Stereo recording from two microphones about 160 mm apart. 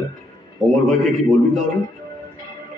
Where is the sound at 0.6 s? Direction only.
Centre (ahead or behind).